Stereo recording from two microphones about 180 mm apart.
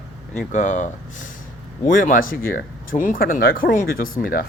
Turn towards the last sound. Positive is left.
turn(degrees=50)  # may be behind; listen again after turning